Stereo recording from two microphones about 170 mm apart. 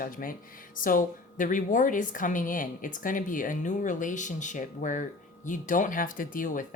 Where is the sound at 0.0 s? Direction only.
55° left (ahead or behind).